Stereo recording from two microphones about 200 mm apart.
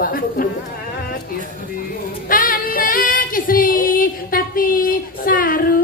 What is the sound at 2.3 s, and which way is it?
Female singing, 45° left (ahead or behind).